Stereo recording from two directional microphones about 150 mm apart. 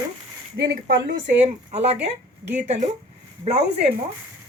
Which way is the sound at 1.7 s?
45° right (ahead or behind).